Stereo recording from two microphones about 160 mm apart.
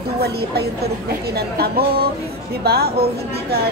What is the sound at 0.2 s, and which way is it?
A woman's voice, 85° right.